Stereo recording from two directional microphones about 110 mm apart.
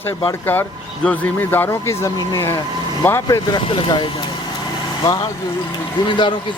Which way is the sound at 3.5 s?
50° left (ahead or behind).